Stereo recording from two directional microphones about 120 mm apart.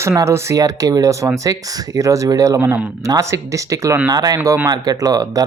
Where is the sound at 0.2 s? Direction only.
25° right (ahead or behind).